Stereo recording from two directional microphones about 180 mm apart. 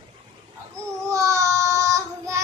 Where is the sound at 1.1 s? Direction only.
15° right (ahead or behind).